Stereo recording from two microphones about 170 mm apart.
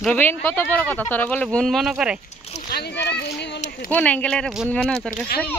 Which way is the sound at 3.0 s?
80° left.